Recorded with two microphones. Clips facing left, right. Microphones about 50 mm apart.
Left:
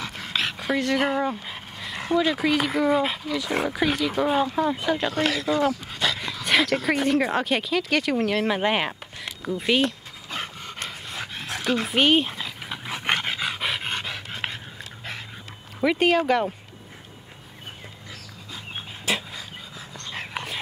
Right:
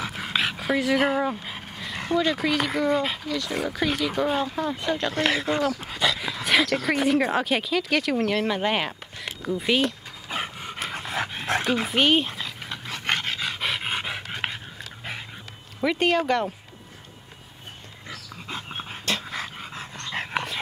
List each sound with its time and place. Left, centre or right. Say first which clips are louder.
0.0 s speech: right 2 dB; centre
5.2 s speech: right 1 dB; right
5.9 s dog: right 1 dB; centre
6.7 s speech: even; centre
10.3 s pant: right 2 dB; centre
11.6 s dog: left 3 dB; centre
13.8 s dog: right 1 dB; centre
15.8 s speech: left 2 dB; centre
19.3 s dog: right 5 dB; right